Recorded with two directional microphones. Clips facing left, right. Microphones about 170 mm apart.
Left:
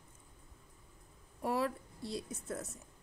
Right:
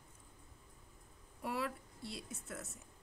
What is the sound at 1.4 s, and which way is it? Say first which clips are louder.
A woman's voice: left 6 dB; 40° left (ahead or behind).